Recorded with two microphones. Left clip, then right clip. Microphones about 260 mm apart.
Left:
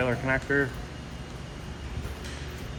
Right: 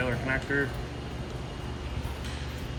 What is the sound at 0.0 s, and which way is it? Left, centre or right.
Speech, centre.